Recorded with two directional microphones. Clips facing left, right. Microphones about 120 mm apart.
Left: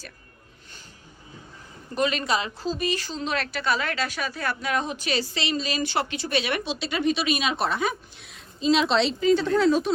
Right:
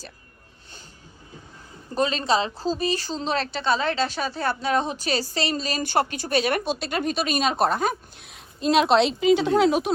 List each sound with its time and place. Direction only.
2.0 s a woman's voice: 30° right (ahead or behind); by 9.9 s 60° right (ahead or behind)